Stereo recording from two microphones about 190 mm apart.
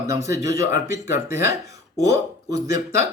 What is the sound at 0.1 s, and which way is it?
Speech, 15° right (ahead or behind).